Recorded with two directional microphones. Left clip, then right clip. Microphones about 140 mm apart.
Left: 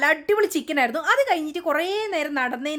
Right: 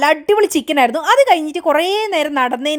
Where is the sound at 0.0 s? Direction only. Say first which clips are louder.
Right 7 dB; 45° right (ahead or behind).